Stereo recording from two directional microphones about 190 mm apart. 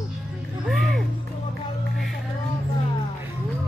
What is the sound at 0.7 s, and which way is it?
Music, centre (ahead or behind).